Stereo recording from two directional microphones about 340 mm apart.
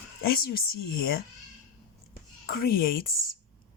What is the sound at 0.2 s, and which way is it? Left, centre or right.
Speech, left.